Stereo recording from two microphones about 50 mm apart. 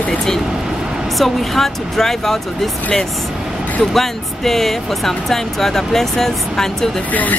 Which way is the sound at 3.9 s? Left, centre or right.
Centre.